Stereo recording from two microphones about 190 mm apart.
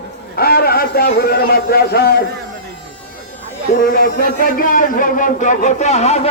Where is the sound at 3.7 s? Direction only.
50° left (ahead or behind).